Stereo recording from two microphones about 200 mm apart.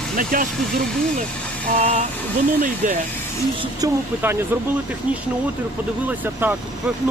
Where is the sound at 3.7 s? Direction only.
15° right (ahead or behind).